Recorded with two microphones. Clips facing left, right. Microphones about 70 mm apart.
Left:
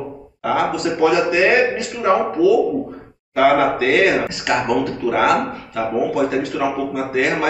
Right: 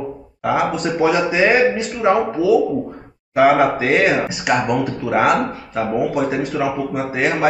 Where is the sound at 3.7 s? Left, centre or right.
Centre.